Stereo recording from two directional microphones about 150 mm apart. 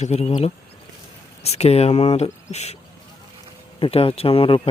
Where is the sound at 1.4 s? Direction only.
45° left (ahead or behind).